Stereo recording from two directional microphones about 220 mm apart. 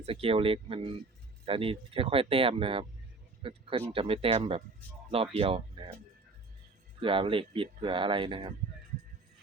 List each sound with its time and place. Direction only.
0.0 s speech: 25° right (ahead or behind)
7.0 s speech: 25° right (ahead or behind)